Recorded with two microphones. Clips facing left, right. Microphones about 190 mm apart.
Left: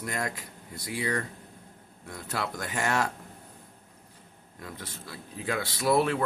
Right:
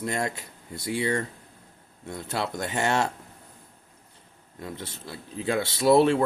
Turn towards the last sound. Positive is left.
turn(degrees=-25)  # may be behind; listen again after turning